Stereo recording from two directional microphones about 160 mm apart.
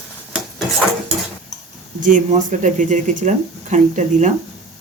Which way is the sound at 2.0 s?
55° right (ahead or behind).